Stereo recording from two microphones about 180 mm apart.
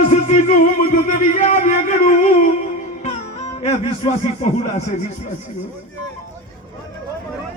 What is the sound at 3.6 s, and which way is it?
Speech, 35° left (ahead or behind).